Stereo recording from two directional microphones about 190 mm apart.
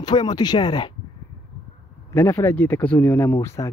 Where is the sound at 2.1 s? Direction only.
10° left (ahead or behind).